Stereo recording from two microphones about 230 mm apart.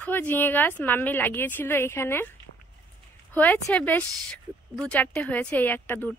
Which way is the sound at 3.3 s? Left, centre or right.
Centre.